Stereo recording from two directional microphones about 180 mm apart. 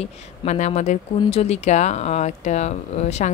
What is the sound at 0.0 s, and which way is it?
Speech, 40° left (ahead or behind).